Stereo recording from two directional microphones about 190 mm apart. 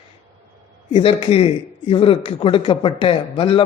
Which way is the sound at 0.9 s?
30° left (ahead or behind).